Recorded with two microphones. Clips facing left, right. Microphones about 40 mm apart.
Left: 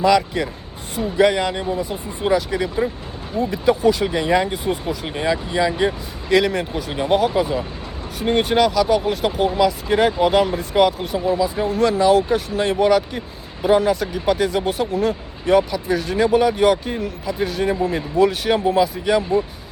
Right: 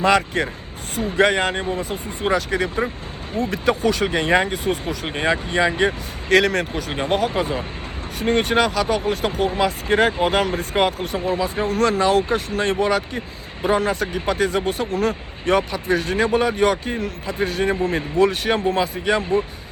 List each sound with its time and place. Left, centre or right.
0.0 s speech: right
2.2 s speech: right
3.5 s speech: right
4.0 s speech: right
4.5 s speech: right
5.1 s speech: right
6.2 s speech: right
6.9 s speech: right
10.4 s speech: right